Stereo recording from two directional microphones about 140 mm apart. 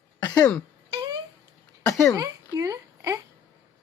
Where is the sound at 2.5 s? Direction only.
25° right (ahead or behind).